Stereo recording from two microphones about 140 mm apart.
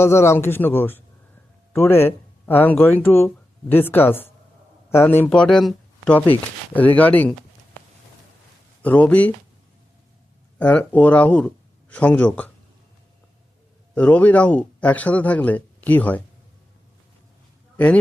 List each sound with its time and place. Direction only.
0.0 s speech: 20° left (ahead or behind)
8.8 s speech: 10° left (ahead or behind)
10.6 s speech: 10° left (ahead or behind)
13.9 s speech: 10° left (ahead or behind)